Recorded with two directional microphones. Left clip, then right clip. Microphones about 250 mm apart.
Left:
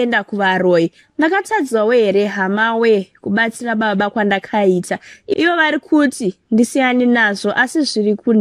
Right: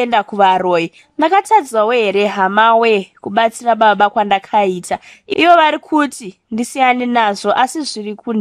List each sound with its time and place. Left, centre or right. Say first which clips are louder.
0.0 s a woman's voice: right 4 dB; centre